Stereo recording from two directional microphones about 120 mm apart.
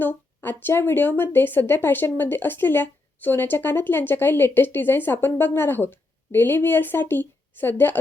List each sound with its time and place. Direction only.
0.0 s a woman's voice: 15° left (ahead or behind)